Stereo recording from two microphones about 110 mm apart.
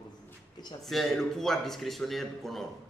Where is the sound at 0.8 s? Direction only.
Centre (ahead or behind).